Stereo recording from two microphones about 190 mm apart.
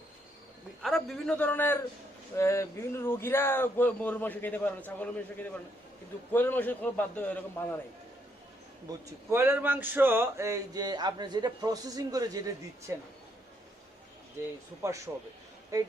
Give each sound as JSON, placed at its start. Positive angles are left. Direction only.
{"t": 0.8, "sound": "a man's voice", "side_deg": 0}
{"t": 8.9, "sound": "speech", "side_deg": -15}
{"t": 14.8, "sound": "speech", "side_deg": -15}